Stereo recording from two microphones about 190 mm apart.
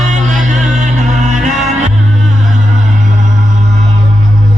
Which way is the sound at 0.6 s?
40° right (ahead or behind).